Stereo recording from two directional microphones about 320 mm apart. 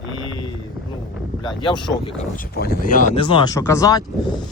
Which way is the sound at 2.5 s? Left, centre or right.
Left.